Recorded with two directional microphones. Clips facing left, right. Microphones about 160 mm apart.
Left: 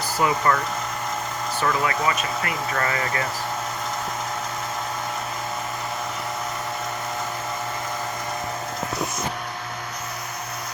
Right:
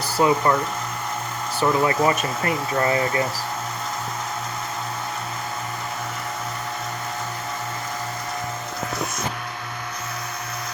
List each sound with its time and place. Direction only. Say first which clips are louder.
0.2 s speech: right 3 dB; 25° right (ahead or behind)
1.6 s speech: right 5 dB; 30° right (ahead or behind)